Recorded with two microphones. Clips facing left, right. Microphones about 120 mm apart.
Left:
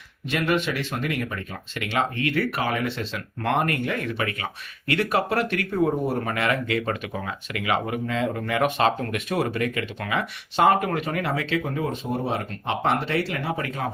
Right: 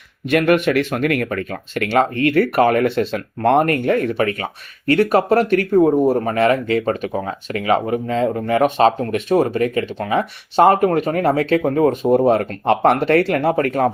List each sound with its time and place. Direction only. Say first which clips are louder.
0.3 s speech: right 9 dB; 55° right (ahead or behind)